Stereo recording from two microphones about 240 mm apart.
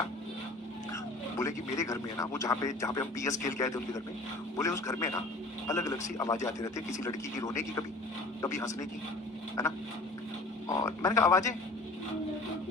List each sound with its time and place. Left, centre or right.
1.4 s speech: centre
10.7 s speech: centre